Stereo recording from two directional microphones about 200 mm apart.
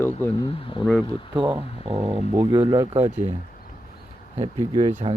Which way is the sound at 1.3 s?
25° right (ahead or behind).